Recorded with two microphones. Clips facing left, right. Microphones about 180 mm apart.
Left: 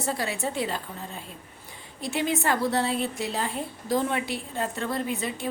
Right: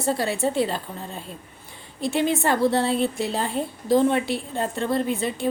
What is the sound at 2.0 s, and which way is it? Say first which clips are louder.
A woman's voice: right 5 dB; 30° right (ahead or behind).